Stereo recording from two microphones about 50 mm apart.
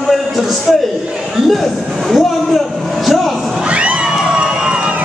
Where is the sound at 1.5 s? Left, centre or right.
Centre.